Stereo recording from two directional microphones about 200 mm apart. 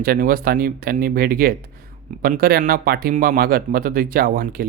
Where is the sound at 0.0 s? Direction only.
45° right (ahead or behind).